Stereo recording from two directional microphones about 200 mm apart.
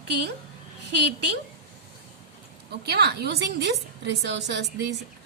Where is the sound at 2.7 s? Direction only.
55° right (ahead or behind).